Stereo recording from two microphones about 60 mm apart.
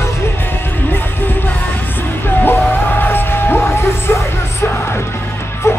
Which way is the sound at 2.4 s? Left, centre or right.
Left.